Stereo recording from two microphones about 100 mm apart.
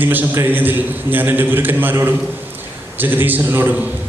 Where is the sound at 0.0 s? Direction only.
20° right (ahead or behind).